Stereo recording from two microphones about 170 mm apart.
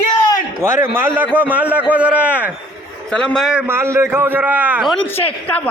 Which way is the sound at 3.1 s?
5° left (ahead or behind).